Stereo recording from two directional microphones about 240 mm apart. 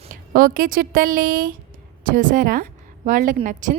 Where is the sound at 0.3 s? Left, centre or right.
Right.